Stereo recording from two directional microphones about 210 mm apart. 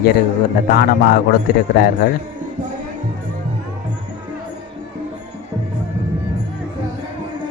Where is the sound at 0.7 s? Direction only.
45° left (ahead or behind).